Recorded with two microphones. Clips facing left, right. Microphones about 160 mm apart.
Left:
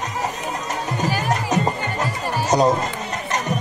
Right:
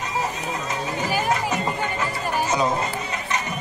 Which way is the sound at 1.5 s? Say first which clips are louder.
Left 3 dB; 40° left (ahead or behind).